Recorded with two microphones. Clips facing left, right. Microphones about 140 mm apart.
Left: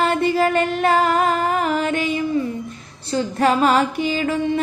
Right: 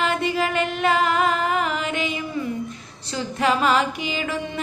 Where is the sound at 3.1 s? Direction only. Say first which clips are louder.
Left 4 dB; 40° left (ahead or behind).